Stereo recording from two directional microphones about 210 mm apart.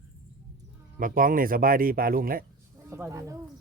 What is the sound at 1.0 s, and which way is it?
A man's voice, 40° right (ahead or behind).